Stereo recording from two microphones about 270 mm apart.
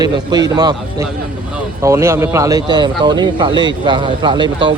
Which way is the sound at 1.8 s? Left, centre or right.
Centre.